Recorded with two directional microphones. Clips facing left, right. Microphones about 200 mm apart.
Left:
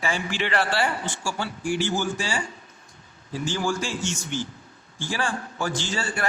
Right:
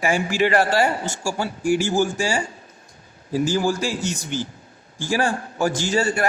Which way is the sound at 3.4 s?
40° right (ahead or behind).